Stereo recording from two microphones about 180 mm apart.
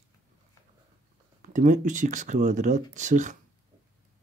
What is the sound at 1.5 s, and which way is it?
Speech, 45° right (ahead or behind).